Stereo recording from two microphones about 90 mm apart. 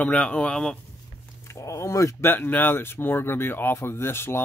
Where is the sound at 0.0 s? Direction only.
15° left (ahead or behind).